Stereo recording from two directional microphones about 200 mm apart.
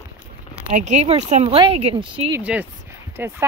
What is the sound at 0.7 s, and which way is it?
Speech, 35° right (ahead or behind).